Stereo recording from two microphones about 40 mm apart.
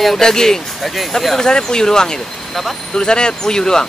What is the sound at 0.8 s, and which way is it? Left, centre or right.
Speech, centre.